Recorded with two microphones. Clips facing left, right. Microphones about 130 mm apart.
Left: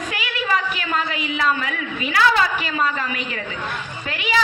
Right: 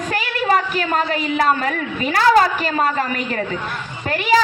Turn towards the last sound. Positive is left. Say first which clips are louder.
# right 6 dB
turn(degrees=-40)  # may be behind; listen again after turning